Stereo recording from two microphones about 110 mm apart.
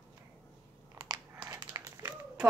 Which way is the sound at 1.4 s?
30° right (ahead or behind).